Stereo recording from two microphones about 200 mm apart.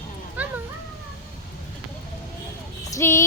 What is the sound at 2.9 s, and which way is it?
Music, 15° left (ahead or behind).